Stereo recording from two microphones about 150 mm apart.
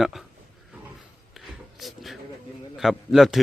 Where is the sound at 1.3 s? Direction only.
Centre (ahead or behind).